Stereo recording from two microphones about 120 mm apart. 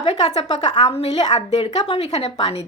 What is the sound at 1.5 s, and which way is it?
Speech, 65° left (ahead or behind).